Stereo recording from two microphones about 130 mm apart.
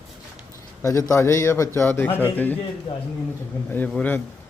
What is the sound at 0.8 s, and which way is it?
A man's voice, 25° left (ahead or behind).